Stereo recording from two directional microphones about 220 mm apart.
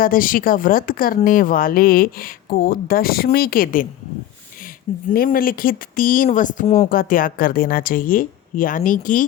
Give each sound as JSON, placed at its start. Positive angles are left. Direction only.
{"t": 0.0, "sound": "speech", "side_deg": 40}
{"t": 5.1, "sound": "speech", "side_deg": 40}